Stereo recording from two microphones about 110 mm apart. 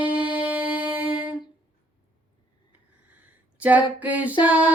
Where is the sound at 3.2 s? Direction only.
15° right (ahead or behind).